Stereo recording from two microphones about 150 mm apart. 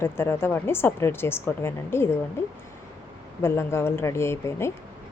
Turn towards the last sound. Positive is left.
turn(degrees=15)  # may be behind; listen again after turning